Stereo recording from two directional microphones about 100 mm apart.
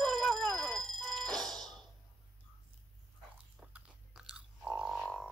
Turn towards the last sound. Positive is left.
turn(degrees=5)  # may be behind; listen again after turning